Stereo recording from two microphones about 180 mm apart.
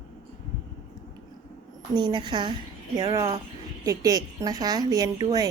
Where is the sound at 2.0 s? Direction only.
25° right (ahead or behind).